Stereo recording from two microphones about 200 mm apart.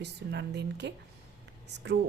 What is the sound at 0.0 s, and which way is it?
A woman's voice, 55° right (ahead or behind).